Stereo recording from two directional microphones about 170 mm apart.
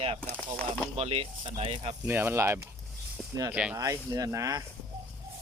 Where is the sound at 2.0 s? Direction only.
15° right (ahead or behind).